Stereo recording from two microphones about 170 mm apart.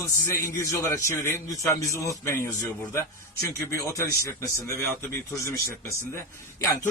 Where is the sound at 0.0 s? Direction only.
15° left (ahead or behind).